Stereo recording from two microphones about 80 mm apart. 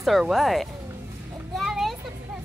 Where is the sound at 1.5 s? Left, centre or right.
Centre.